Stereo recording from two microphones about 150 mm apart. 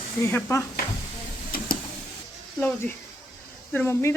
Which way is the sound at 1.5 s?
75° left (ahead or behind).